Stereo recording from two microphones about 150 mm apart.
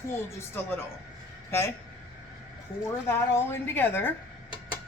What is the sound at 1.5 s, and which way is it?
Speech, 15° left (ahead or behind).